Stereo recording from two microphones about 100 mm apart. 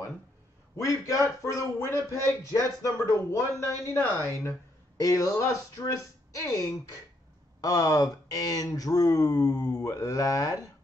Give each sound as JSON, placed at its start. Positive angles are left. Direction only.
{"t": 0.7, "sound": "speech", "side_deg": 30}
{"t": 4.9, "sound": "speech", "side_deg": 35}